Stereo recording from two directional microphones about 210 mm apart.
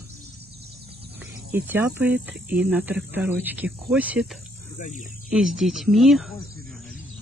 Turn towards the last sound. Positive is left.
turn(degrees=0)  # may be behind; listen again after turning